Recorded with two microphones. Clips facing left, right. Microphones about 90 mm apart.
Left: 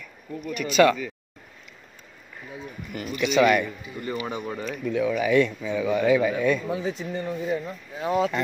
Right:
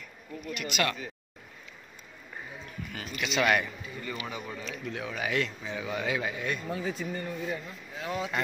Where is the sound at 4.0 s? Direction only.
35° left (ahead or behind).